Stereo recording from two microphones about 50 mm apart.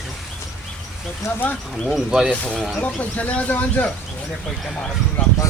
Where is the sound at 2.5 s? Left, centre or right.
Centre.